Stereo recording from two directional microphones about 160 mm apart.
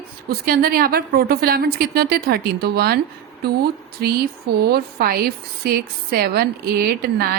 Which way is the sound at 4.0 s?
90° right.